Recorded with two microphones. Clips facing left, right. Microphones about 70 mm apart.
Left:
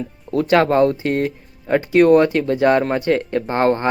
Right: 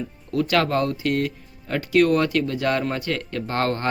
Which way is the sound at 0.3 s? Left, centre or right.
Left.